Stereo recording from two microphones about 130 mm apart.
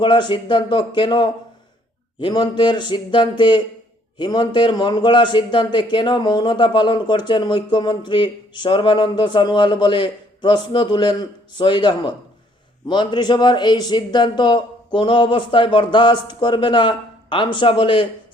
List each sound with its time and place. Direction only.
0.0 s a man's voice: 35° left (ahead or behind)